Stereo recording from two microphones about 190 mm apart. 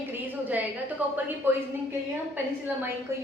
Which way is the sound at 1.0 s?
10° right (ahead or behind).